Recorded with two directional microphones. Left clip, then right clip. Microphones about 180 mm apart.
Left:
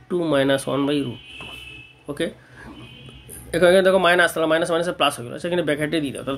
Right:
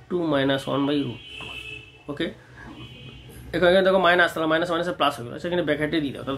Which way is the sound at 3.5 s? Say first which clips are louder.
Left 3 dB; 40° left (ahead or behind).